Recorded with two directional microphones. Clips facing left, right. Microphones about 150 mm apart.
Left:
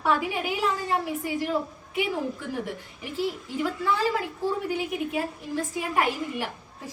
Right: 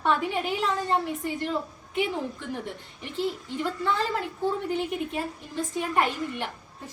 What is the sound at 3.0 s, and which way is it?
A woman's voice, 5° left (ahead or behind).